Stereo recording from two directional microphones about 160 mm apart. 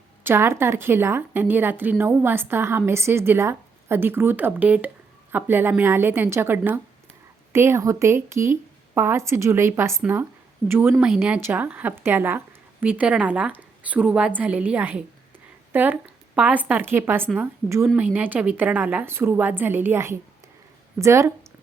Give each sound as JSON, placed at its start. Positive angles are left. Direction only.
{"t": 0.3, "sound": "a woman's voice", "side_deg": -15}